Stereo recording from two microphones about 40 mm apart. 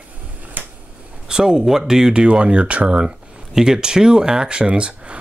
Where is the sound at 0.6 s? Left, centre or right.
Right.